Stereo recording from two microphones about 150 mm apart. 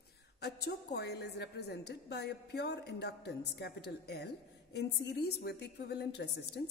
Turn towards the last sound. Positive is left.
turn(degrees=90)